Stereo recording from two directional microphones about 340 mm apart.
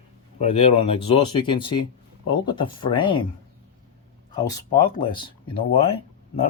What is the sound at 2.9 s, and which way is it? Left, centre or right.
Speech, centre.